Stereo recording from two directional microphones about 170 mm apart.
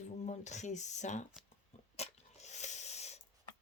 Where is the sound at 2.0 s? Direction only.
40° left (ahead or behind).